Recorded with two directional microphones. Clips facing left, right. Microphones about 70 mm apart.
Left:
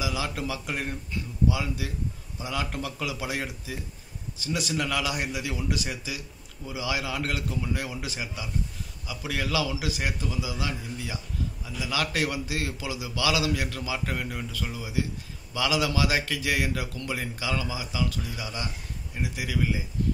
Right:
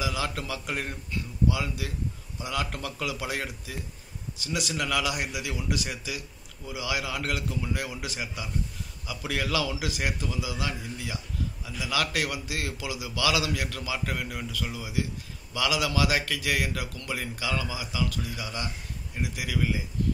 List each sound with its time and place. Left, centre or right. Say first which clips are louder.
0.0 s a man's voice: even; centre